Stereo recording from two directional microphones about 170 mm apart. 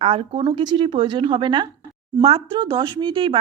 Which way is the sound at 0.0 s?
35° right (ahead or behind).